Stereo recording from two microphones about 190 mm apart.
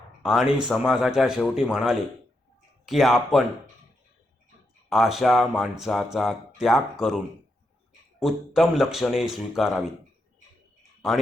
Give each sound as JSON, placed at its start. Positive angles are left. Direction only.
{"t": 0.2, "sound": "speech", "side_deg": -5}
{"t": 4.9, "sound": "speech", "side_deg": 0}
{"t": 8.2, "sound": "speech", "side_deg": 0}